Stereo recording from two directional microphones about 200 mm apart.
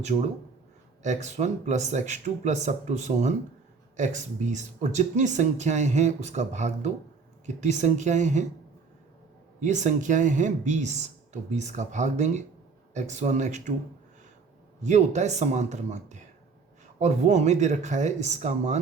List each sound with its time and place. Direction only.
1.0 s speech: 35° right (ahead or behind)
9.6 s speech: 35° right (ahead or behind)
14.8 s speech: 35° right (ahead or behind)